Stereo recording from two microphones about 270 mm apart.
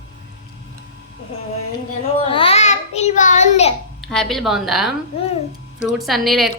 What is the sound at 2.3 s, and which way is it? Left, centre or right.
Child singing, centre.